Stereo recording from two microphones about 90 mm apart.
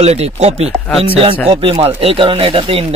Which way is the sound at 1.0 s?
90° right.